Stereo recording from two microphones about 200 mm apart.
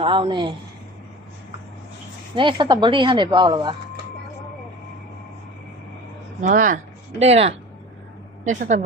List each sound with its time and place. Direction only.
0.0 s a woman's voice: 25° right (ahead or behind)
2.3 s a woman's voice: 25° right (ahead or behind)
6.4 s speech: 40° right (ahead or behind)
7.2 s speech: 30° right (ahead or behind)